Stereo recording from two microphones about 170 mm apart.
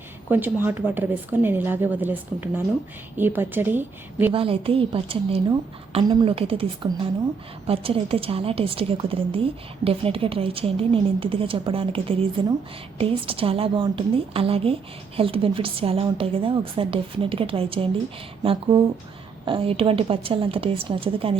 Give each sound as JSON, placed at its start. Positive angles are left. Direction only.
{"t": 0.3, "sound": "a woman's voice", "side_deg": -10}
{"t": 4.3, "sound": "a woman's voice", "side_deg": -30}
{"t": 19.5, "sound": "a woman's voice", "side_deg": -30}